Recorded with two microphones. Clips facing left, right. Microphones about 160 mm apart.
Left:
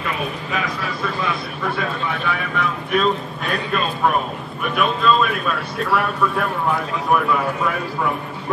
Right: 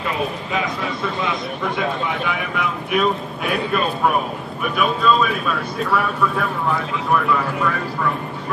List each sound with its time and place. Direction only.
0.5 s a man's voice: 25° right (ahead or behind); by 8.1 s 10° left (ahead or behind)